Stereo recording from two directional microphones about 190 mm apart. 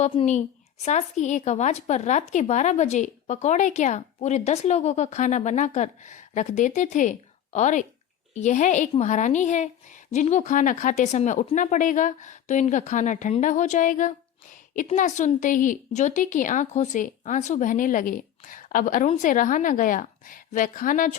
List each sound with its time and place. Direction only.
0.0 s a woman's voice: 35° left (ahead or behind)